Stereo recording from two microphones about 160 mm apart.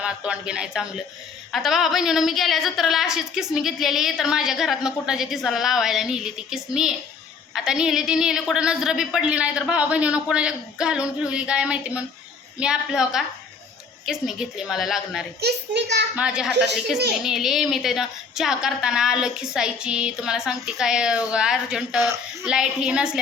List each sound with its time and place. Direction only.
0.0 s a woman's voice: 5° right (ahead or behind)
15.4 s a child's voice: 90° right
16.1 s a woman's voice: 5° right (ahead or behind)